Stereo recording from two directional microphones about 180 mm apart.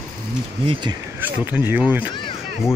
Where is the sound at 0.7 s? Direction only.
25° right (ahead or behind).